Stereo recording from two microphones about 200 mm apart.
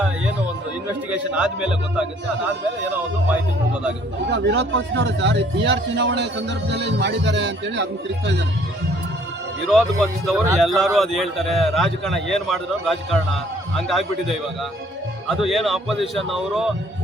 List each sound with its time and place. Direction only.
1.1 s a man's voice: 5° right (ahead or behind)
4.3 s speech: 60° right (ahead or behind)
9.6 s a man's voice: centre (ahead or behind)